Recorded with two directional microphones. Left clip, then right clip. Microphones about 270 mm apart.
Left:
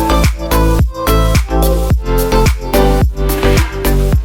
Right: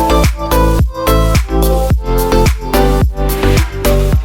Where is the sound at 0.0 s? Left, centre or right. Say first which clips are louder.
Right 2 dB; centre.